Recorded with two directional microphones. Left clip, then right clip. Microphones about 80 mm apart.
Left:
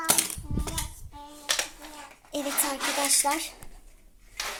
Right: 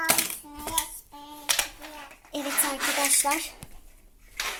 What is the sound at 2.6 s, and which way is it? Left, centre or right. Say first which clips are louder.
Speech: right 2 dB; left.